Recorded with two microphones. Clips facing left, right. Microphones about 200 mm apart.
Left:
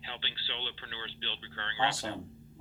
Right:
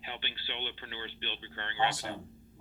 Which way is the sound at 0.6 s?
15° right (ahead or behind).